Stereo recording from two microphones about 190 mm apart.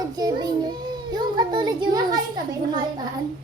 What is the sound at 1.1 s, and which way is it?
A child's voice, 20° right (ahead or behind).